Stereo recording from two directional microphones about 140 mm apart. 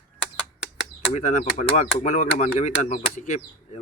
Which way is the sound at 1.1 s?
60° left (ahead or behind).